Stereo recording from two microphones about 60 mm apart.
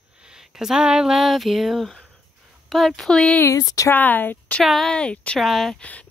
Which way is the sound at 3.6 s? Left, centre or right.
Left.